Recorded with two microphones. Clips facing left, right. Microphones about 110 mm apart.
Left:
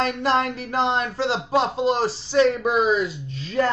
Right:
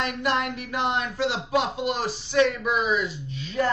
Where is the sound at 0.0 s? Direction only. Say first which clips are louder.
Left 4 dB; 35° left (ahead or behind).